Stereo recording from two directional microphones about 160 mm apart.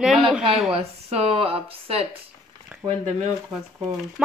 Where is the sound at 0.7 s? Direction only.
40° right (ahead or behind).